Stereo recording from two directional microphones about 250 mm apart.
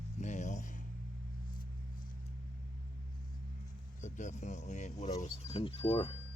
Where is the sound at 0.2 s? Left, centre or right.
Left.